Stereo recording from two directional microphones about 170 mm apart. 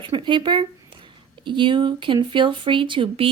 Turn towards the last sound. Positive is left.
turn(degrees=-30)  # may be behind; listen again after turning